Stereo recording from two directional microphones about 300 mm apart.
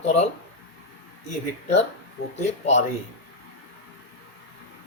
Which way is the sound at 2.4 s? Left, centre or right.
Left.